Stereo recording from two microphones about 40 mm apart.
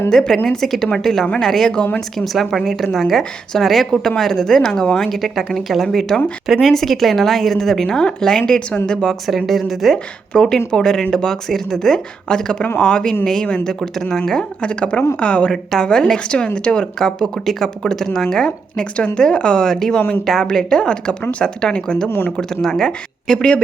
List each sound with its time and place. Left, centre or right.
0.1 s a woman's voice: centre
8.4 s a woman's voice: left
9.2 s a woman's voice: centre
9.9 s a woman's voice: centre
14.6 s a woman's voice: left
15.8 s a woman's voice: centre
18.4 s a woman's voice: left
20.0 s speech: left
20.2 s a woman's voice: centre
20.5 s a woman's voice: centre